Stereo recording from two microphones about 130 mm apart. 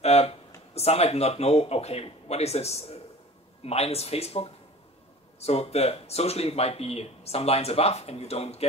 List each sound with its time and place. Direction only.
0.0 s speech: 55° left (ahead or behind)